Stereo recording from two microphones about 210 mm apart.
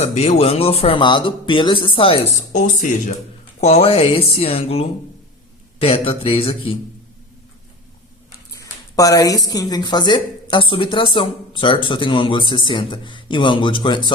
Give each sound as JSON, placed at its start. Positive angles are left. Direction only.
{"t": 0.0, "sound": "speech", "side_deg": 30}
{"t": 8.5, "sound": "speech", "side_deg": 15}